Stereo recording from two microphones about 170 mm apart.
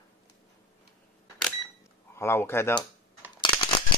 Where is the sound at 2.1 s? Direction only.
15° left (ahead or behind).